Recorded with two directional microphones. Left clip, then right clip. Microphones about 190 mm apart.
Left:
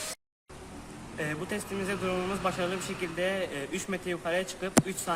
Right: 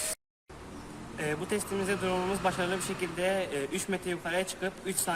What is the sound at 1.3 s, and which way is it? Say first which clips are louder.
A man's voice: right 5 dB; 15° left (ahead or behind).